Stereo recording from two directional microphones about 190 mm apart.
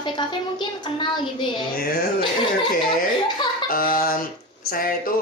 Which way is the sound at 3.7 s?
50° left (ahead or behind).